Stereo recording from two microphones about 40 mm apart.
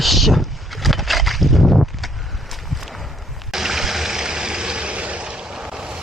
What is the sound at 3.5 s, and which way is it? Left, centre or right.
Vehicle, centre.